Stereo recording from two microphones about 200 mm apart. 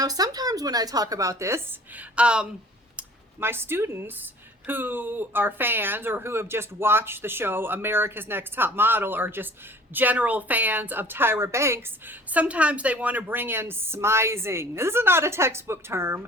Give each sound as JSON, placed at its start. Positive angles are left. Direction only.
{"t": 0.0, "sound": "a woman's voice", "side_deg": -20}